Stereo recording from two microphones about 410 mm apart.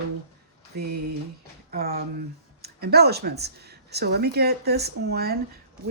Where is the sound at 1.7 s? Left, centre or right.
Right.